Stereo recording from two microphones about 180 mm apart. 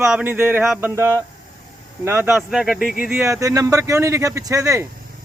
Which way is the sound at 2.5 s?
Centre (ahead or behind).